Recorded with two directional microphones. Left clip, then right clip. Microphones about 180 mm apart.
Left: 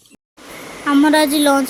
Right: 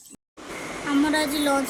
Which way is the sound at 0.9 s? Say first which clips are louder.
Left 10 dB; 40° left (ahead or behind).